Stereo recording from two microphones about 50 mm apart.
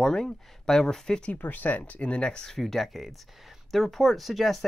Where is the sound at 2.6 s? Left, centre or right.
Centre.